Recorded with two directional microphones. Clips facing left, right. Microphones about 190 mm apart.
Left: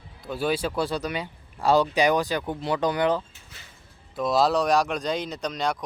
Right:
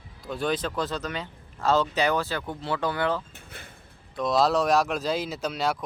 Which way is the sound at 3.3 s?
55° right (ahead or behind).